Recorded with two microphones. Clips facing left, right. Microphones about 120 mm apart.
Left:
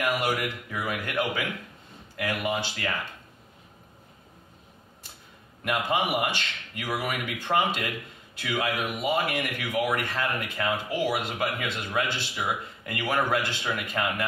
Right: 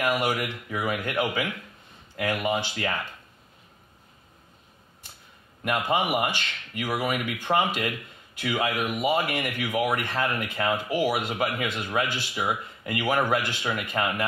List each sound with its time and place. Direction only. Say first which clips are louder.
0.0 s speech: right 1 dB; 20° right (ahead or behind)
5.6 s speech: right 1 dB; 20° right (ahead or behind)